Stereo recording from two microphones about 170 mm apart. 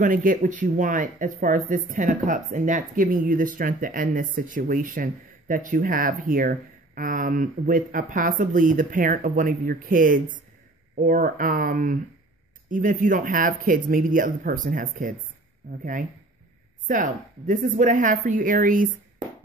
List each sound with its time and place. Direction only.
0.0 s speech: 55° right (ahead or behind)